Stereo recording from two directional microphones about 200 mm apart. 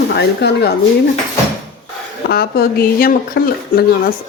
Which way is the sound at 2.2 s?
50° left (ahead or behind).